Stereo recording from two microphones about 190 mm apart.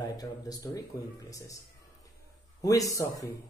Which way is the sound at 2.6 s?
20° left (ahead or behind).